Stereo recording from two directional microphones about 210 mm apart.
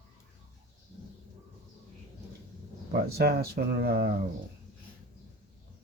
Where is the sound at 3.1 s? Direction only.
50° right (ahead or behind).